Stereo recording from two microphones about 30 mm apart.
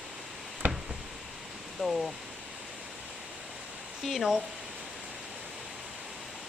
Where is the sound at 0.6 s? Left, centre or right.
Right.